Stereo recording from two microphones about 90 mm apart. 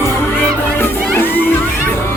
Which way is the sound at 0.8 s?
25° left (ahead or behind).